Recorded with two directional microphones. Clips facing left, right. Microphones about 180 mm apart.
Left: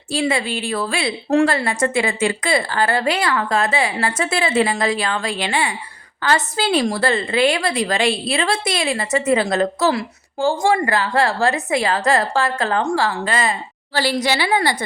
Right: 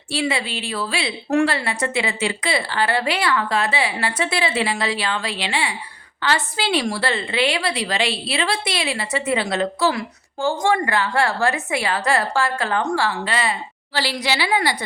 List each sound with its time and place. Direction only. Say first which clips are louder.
0.1 s a woman's voice: left 3 dB; 45° left (ahead or behind)
1.3 s a woman's voice: left 3 dB; 35° left (ahead or behind)
1.5 s a woman's voice: left 4 dB; 45° left (ahead or behind)